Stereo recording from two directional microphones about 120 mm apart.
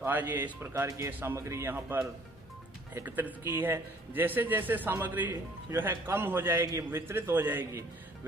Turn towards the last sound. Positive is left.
turn(degrees=-20)  # may be behind; listen again after turning